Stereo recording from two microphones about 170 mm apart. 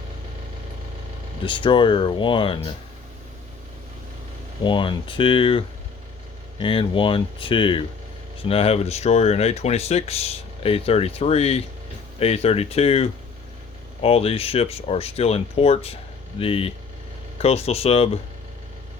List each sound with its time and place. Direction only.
1.5 s speech: 30° left (ahead or behind)
4.6 s speech: 30° left (ahead or behind)